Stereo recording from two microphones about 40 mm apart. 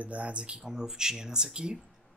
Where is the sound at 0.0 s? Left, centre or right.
Right.